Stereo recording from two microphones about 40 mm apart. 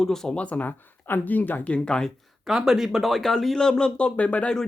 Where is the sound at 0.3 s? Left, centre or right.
Left.